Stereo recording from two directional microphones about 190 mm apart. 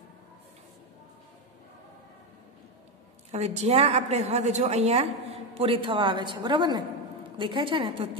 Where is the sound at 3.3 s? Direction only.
35° right (ahead or behind).